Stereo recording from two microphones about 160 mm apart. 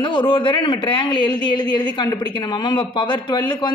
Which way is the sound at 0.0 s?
30° left (ahead or behind).